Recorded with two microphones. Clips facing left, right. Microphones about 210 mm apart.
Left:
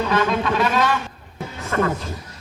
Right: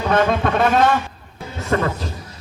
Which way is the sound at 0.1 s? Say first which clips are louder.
Right 7 dB; 55° right (ahead or behind).